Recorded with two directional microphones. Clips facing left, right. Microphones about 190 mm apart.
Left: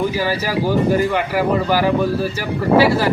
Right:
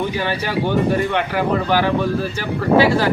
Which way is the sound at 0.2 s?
5° left (ahead or behind).